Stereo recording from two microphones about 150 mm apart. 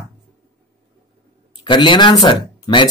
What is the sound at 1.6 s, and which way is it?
A woman's voice, 30° left (ahead or behind).